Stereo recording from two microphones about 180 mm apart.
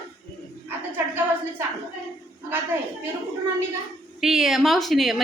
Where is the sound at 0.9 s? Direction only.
10° right (ahead or behind).